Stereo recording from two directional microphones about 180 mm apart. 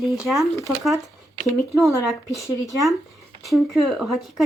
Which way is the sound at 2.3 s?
15° left (ahead or behind).